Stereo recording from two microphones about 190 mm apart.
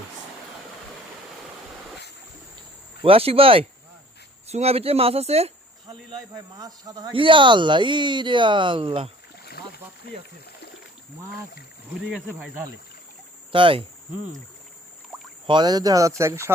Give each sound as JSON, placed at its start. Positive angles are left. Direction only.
{"t": 3.0, "sound": "speech", "side_deg": -30}
{"t": 5.9, "sound": "speech", "side_deg": -20}
{"t": 9.3, "sound": "boat", "side_deg": 55}
{"t": 12.1, "sound": "speech", "side_deg": -10}
{"t": 13.5, "sound": "speech", "side_deg": -25}
{"t": 15.4, "sound": "speech", "side_deg": -25}